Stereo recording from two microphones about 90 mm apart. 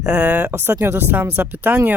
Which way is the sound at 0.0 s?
15° right (ahead or behind).